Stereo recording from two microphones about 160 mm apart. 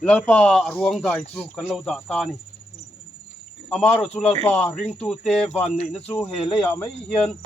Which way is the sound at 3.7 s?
5° left (ahead or behind).